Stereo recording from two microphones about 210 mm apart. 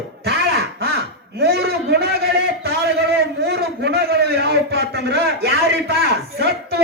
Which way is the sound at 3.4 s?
50° right (ahead or behind).